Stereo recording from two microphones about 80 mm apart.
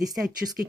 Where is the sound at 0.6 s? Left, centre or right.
Right.